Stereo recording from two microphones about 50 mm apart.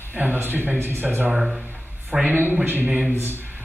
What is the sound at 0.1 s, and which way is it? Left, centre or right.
Speech, right.